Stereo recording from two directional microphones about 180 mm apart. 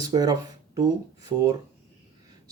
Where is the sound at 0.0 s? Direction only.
20° right (ahead or behind).